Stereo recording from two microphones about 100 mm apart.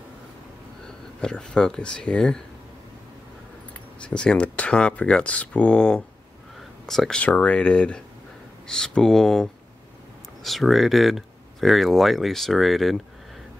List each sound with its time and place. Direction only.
0.8 s speech: 10° left (ahead or behind)
4.0 s speech: 10° left (ahead or behind)